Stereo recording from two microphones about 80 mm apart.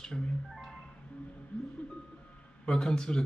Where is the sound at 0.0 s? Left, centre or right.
Centre.